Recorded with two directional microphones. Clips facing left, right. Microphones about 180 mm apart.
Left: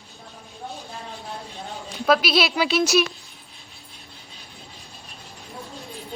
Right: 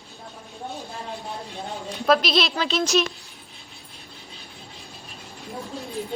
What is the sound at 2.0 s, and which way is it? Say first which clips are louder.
Speech: left 1 dB; 5° left (ahead or behind).